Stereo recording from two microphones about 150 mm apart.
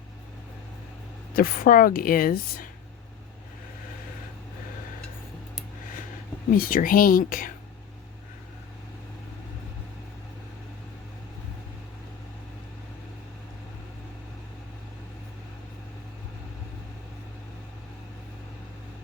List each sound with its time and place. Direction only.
1.3 s speech: 70° left (ahead or behind)
6.5 s speech: 75° left (ahead or behind)